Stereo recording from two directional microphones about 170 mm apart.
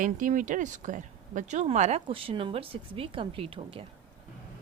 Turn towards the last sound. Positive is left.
turn(degrees=-30)  # may be behind; listen again after turning